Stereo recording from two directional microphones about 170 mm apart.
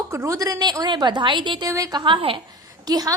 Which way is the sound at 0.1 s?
15° right (ahead or behind).